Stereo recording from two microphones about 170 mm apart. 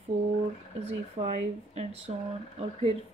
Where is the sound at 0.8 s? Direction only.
40° right (ahead or behind).